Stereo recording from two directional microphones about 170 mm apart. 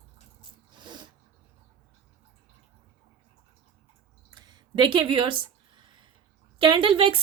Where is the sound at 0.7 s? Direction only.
25° right (ahead or behind).